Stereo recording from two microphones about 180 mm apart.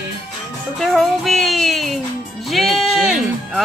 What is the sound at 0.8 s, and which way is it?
Music, centre (ahead or behind).